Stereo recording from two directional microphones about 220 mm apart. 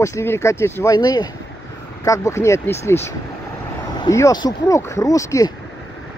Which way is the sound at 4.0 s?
15° left (ahead or behind).